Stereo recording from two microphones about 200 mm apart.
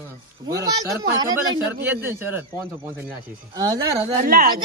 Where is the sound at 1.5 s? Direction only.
10° right (ahead or behind).